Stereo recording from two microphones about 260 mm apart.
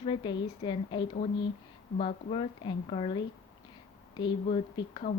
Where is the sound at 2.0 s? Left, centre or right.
Left.